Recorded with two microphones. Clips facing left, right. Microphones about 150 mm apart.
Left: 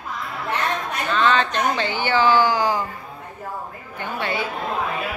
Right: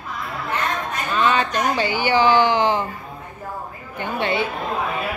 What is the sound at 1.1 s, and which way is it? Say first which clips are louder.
Speech: even; 10° right (ahead or behind).